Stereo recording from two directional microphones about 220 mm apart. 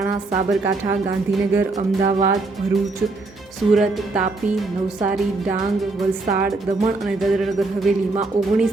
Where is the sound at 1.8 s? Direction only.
35° right (ahead or behind).